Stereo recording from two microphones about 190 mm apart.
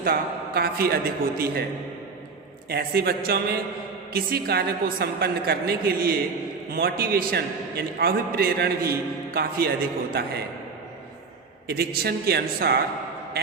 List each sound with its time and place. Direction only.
0.0 s a man's voice: 50° right (ahead or behind)
2.6 s a man's voice: 55° right (ahead or behind)
11.7 s a man's voice: 55° right (ahead or behind)